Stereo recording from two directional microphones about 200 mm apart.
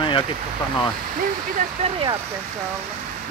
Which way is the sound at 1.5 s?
30° right (ahead or behind).